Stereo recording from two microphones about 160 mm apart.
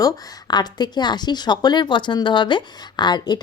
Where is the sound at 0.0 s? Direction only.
25° left (ahead or behind).